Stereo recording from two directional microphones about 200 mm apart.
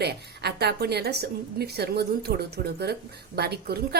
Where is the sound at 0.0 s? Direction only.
55° right (ahead or behind).